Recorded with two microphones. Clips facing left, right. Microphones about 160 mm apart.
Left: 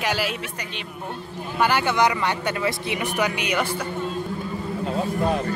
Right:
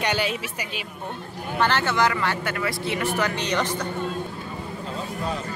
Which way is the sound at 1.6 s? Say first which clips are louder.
Left 2 dB; 10° left (ahead or behind).